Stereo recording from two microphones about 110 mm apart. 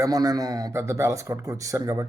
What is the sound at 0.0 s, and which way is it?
A man's voice, 30° right (ahead or behind).